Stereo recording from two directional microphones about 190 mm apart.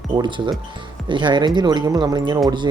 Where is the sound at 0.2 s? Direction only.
25° right (ahead or behind).